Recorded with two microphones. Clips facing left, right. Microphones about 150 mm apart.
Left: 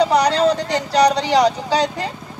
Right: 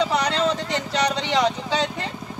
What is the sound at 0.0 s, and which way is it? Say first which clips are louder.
Speech: left 6 dB; 35° left (ahead or behind).